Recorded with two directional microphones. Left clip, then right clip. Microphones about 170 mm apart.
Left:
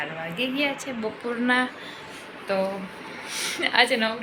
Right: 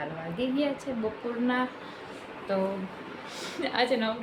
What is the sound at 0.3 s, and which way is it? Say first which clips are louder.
Speech: left 3 dB; 30° right (ahead or behind).